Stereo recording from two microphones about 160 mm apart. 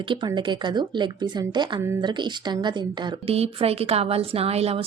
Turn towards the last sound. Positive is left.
turn(degrees=-40)  # may be behind; listen again after turning